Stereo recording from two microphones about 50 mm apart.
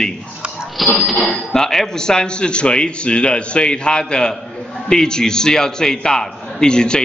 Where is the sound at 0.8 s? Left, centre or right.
Centre.